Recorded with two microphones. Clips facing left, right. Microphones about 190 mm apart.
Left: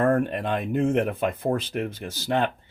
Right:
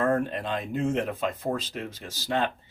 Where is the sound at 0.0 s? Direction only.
55° left (ahead or behind).